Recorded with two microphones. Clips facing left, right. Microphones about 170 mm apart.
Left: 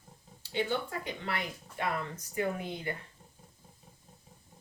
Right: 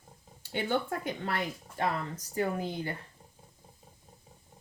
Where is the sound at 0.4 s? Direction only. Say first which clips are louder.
Right 2 dB; 55° right (ahead or behind).